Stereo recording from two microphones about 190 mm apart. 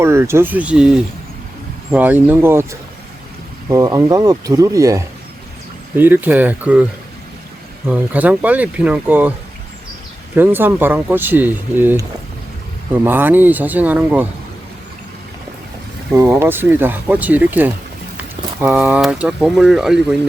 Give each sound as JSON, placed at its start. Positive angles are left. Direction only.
{"t": 0.0, "sound": "speech", "side_deg": -15}
{"t": 7.9, "sound": "speech", "side_deg": -10}
{"t": 10.3, "sound": "speech", "side_deg": -10}
{"t": 16.1, "sound": "speech", "side_deg": -10}